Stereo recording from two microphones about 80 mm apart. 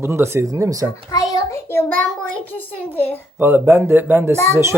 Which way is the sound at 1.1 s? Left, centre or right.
Left.